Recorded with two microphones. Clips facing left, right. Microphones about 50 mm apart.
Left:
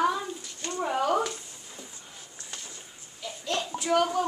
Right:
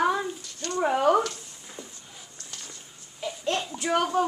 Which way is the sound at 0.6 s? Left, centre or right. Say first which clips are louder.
Right 3 dB; centre.